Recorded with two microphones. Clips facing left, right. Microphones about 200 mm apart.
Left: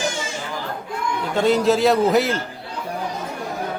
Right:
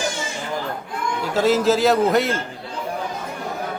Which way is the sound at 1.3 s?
Centre (ahead or behind).